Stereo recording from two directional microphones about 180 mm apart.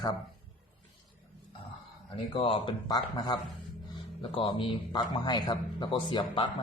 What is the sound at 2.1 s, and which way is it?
A man's voice, 30° left (ahead or behind).